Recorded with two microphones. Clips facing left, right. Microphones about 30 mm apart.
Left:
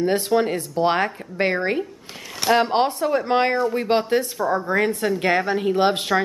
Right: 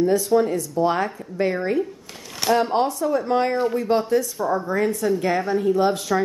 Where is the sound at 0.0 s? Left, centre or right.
Left.